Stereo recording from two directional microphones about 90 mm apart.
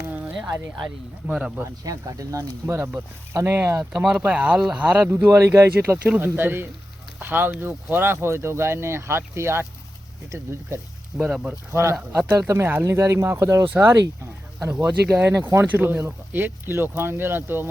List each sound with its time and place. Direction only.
1.3 s speech: 10° right (ahead or behind)
1.8 s speech: 40° right (ahead or behind)
2.6 s speech: 30° right (ahead or behind)
3.9 s speech: 5° right (ahead or behind)
5.0 s speech: 25° right (ahead or behind)
11.2 s speech: 5° right (ahead or behind)
11.7 s speech: 30° right (ahead or behind)
15.2 s speech: 30° right (ahead or behind)